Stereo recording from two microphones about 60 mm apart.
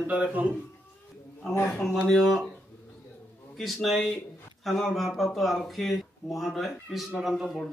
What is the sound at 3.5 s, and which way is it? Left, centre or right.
A man's voice, centre.